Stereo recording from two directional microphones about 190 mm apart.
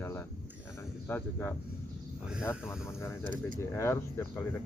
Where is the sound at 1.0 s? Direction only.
10° left (ahead or behind).